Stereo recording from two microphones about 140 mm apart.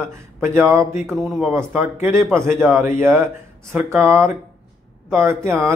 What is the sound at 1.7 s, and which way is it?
Speech, 15° right (ahead or behind).